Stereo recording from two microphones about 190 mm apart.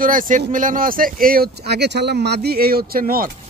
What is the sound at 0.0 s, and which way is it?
Speech, 45° right (ahead or behind).